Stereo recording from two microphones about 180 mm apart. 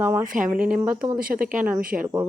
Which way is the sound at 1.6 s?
10° right (ahead or behind).